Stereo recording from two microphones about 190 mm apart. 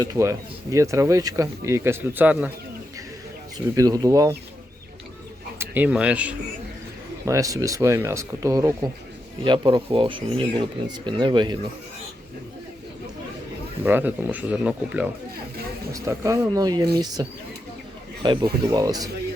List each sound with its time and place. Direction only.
0.0 s speech: 15° right (ahead or behind)
3.8 s speech: 20° right (ahead or behind)
5.5 s speech: 10° right (ahead or behind)
7.3 s speech: 15° right (ahead or behind)
13.8 s speech: 10° right (ahead or behind)